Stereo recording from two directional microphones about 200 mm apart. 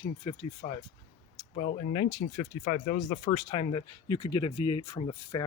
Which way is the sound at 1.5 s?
40° left (ahead or behind).